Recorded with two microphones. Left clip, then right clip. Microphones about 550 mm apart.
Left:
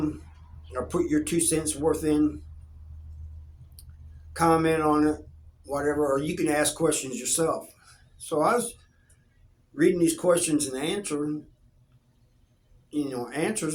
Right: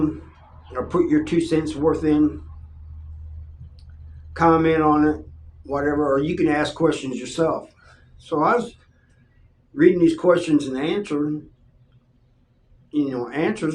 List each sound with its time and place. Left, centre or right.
0.7 s speech: left
4.4 s speech: left
9.7 s speech: left
12.9 s speech: left